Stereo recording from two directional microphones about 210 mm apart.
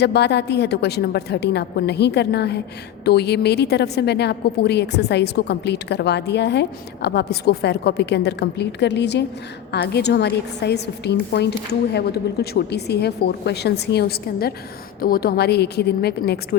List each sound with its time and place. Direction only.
0.0 s a woman's voice: 55° left (ahead or behind)